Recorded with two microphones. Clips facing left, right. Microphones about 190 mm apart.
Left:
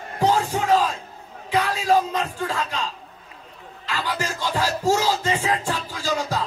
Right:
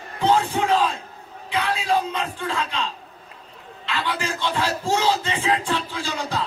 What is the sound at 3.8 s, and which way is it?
Music, 40° left (ahead or behind).